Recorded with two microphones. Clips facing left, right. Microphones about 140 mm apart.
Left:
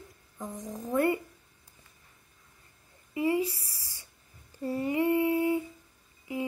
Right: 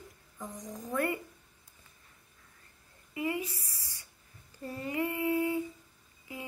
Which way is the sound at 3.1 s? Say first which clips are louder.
Left 6 dB; 30° left (ahead or behind).